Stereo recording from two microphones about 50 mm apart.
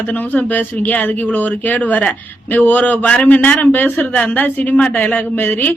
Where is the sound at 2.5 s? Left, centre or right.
Left.